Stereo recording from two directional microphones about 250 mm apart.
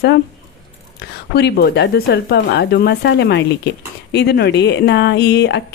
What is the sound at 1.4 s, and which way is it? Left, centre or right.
Speech, left.